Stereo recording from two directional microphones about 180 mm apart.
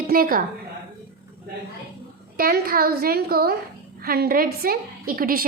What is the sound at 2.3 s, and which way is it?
A woman's voice, 55° right (ahead or behind).